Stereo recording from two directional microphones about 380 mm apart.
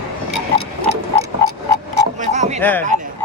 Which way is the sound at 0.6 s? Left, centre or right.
Right.